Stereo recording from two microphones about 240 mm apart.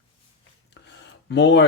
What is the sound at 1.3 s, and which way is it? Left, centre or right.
Speech, left.